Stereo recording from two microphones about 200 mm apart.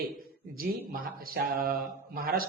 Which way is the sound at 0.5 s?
45° right (ahead or behind).